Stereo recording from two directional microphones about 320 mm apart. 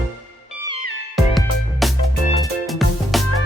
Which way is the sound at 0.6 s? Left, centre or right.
Left.